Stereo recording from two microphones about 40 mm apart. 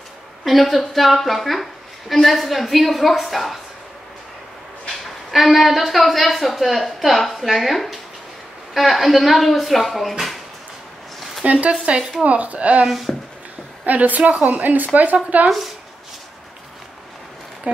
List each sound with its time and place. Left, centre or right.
0.4 s a woman's voice: centre
5.3 s a woman's voice: centre
10.1 s drawer open or close: centre
11.4 s speech: right
11.8 s speech: right
12.8 s a woman's voice: centre
13.8 s speech: right
15.1 s speech: right